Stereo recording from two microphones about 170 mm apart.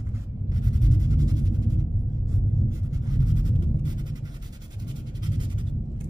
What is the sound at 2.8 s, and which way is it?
Writing, 25° right (ahead or behind).